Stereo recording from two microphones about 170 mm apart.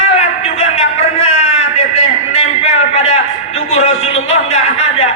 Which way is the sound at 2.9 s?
40° left (ahead or behind).